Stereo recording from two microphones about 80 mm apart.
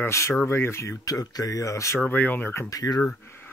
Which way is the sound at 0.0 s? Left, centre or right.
Left.